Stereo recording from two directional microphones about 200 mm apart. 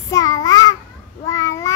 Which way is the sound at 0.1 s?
20° left (ahead or behind).